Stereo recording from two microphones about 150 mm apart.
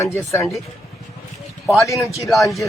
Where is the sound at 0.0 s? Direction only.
20° left (ahead or behind).